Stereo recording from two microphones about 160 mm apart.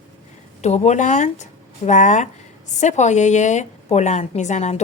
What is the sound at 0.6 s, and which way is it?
Speech, 45° left (ahead or behind).